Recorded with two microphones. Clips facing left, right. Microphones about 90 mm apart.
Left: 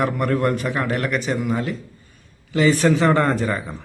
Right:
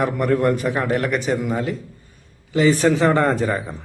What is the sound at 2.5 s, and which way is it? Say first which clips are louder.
Speech: right 1 dB; 35° right (ahead or behind).